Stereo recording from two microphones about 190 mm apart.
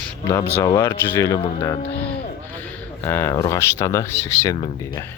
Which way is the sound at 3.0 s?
15° left (ahead or behind).